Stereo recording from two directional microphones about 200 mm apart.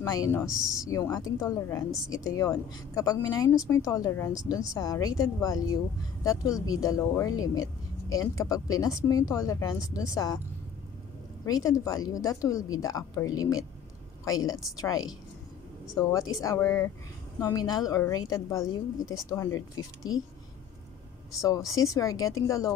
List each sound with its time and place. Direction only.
0.0 s speech: 15° left (ahead or behind)
0.5 s speech: 5° right (ahead or behind)
0.8 s speech: 15° left (ahead or behind)
11.4 s a woman's voice: 20° left (ahead or behind)
21.3 s speech: 15° left (ahead or behind)